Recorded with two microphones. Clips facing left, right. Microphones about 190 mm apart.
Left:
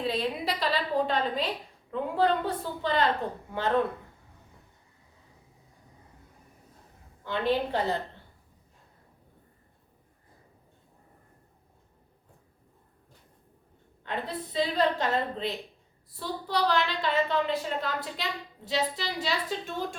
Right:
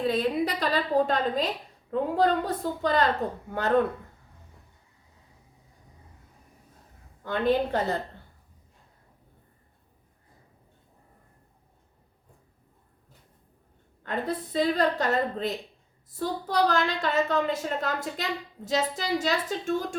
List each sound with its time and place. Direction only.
0.0 s a woman's voice: 50° right (ahead or behind)
7.3 s a woman's voice: 50° right (ahead or behind)
14.0 s a woman's voice: 45° right (ahead or behind)